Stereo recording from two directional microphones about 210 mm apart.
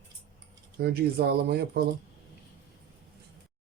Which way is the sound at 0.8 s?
50° right (ahead or behind).